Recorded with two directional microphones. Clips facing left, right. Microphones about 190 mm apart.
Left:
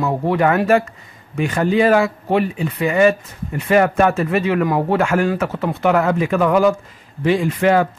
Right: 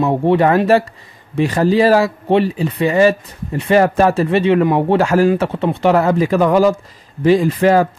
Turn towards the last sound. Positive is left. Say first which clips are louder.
# right 3 dB
turn(degrees=-35)  # may be behind; listen again after turning